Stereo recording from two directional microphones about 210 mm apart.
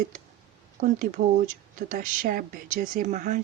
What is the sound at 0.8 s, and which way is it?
Speech, 40° right (ahead or behind).